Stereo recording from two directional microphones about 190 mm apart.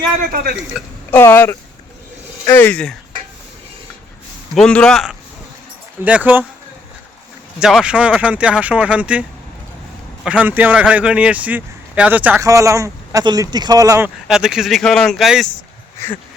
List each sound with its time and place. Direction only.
0.3 s speech: 50° right (ahead or behind)
0.7 s speech: centre (ahead or behind)
1.1 s speech: 10° left (ahead or behind)
4.5 s speech: 5° left (ahead or behind)
7.6 s speech: 5° right (ahead or behind)
10.2 s speech: 10° right (ahead or behind)
14.3 s speech: 5° right (ahead or behind)